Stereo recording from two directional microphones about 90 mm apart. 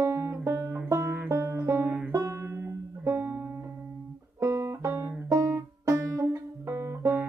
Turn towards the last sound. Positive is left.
turn(degrees=-30)  # may be behind; listen again after turning